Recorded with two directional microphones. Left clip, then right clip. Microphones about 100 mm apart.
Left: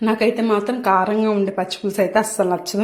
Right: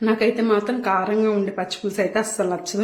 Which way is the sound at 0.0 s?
35° left (ahead or behind).